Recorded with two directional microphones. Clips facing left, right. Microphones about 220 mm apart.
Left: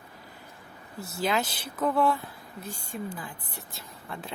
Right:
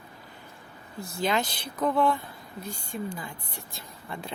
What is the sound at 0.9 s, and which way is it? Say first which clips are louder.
Speech: right 1 dB; 5° left (ahead or behind).